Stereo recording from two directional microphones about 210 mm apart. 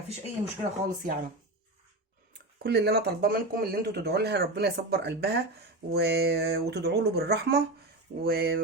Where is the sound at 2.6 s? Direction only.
50° right (ahead or behind).